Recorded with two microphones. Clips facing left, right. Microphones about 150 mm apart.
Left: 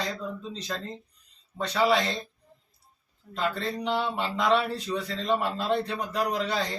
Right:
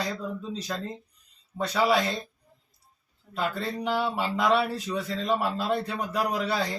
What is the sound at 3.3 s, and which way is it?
Speech, 10° right (ahead or behind).